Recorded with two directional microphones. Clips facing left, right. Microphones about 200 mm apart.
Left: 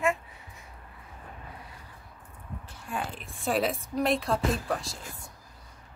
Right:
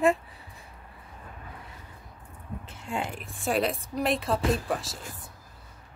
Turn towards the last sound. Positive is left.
turn(degrees=0)  # may be behind; listen again after turning